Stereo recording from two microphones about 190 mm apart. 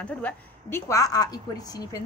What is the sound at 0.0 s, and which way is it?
A woman's voice, 5° left (ahead or behind).